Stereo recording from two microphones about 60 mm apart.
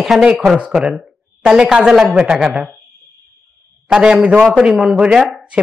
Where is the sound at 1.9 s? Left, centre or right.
Centre.